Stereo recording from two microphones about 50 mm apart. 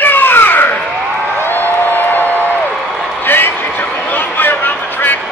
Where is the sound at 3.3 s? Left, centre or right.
Left.